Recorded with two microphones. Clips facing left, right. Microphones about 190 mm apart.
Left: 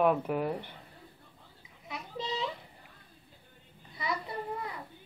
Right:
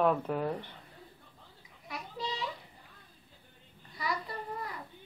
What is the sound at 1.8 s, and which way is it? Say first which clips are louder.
Goat: left 2 dB; 25° left (ahead or behind).